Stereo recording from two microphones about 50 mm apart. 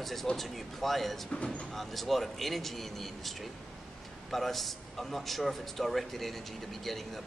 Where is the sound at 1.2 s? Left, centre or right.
Left.